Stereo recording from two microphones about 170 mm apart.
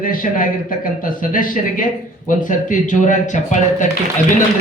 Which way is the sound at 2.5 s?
50° left (ahead or behind).